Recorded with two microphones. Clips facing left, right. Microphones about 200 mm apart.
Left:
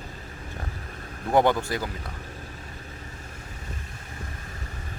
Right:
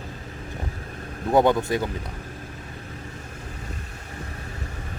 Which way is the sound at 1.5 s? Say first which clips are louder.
Right 3 dB; 20° right (ahead or behind).